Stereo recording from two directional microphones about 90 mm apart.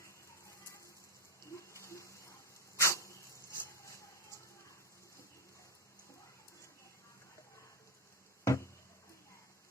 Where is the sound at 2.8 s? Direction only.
35° left (ahead or behind).